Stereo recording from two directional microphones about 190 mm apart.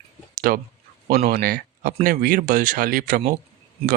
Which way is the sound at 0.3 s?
50° right (ahead or behind).